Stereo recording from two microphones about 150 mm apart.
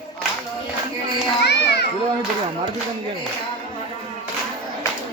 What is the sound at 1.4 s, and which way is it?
Children playing, 90° left.